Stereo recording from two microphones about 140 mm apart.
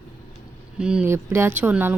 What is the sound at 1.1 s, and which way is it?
Speech, 15° right (ahead or behind).